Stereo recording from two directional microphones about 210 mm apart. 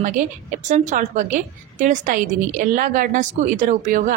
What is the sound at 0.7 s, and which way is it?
A woman's voice, 35° right (ahead or behind).